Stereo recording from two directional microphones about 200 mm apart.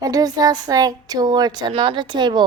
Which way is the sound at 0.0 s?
20° right (ahead or behind).